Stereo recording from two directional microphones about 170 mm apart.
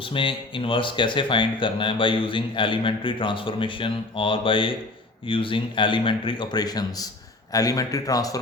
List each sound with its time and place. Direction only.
0.0 s speech: 30° left (ahead or behind)